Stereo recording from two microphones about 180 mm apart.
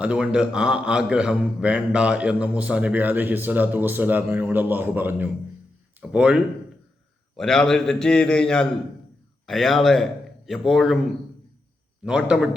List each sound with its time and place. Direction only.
0.0 s a man's voice: 5° right (ahead or behind)
12.0 s a man's voice: 5° right (ahead or behind)